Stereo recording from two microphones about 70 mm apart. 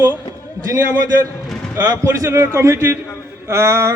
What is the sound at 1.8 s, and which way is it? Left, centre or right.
A man's voice, right.